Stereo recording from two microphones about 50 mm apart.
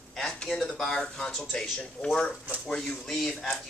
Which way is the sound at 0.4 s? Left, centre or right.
Centre.